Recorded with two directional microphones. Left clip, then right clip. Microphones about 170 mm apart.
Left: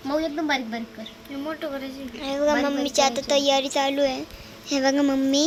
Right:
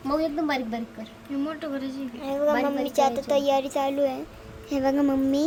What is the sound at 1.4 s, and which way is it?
Speech, 20° left (ahead or behind).